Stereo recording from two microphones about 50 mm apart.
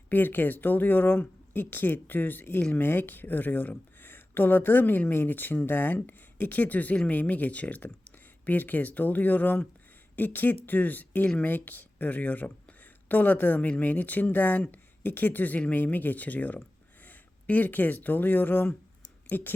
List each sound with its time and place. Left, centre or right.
0.1 s speech: left